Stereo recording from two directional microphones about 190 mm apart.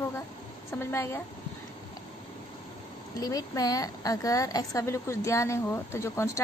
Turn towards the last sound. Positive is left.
turn(degrees=15)  # may be behind; listen again after turning